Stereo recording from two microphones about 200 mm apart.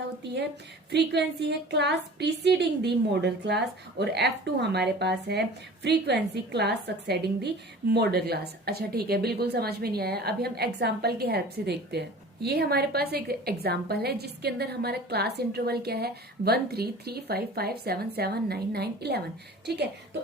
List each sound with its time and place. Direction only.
0.9 s a woman's voice: 60° right (ahead or behind)